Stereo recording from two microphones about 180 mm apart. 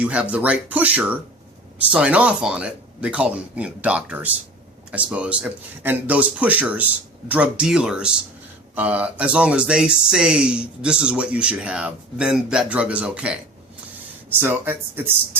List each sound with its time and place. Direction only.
0.0 s speech: 10° right (ahead or behind)